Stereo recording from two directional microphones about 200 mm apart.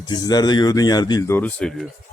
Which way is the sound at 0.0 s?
20° left (ahead or behind).